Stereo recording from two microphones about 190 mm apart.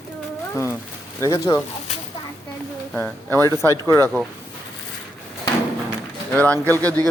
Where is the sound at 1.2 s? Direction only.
15° left (ahead or behind).